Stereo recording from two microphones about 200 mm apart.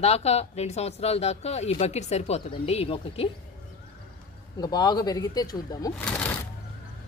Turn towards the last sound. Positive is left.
turn(degrees=5)  # may be behind; listen again after turning